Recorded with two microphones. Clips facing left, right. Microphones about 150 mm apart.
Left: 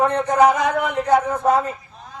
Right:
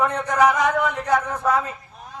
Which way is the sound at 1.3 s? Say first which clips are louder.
Left 4 dB; 35° left (ahead or behind).